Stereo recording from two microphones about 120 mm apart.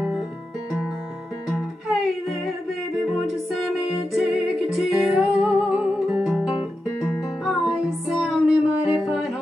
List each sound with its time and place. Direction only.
3.5 s music: 5° right (ahead or behind)